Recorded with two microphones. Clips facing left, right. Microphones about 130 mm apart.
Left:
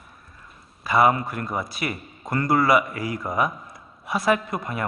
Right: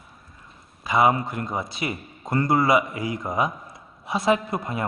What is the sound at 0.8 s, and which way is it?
A man's voice, 20° right (ahead or behind).